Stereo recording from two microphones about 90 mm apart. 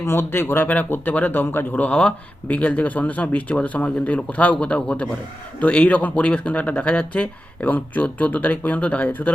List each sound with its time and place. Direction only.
0.0 s speech: 25° left (ahead or behind)